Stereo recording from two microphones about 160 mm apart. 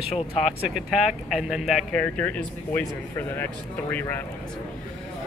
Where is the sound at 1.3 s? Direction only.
Centre (ahead or behind).